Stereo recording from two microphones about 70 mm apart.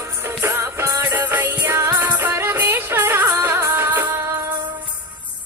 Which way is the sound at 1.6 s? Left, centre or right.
Right.